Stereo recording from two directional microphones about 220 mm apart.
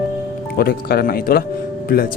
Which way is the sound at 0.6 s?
45° left (ahead or behind).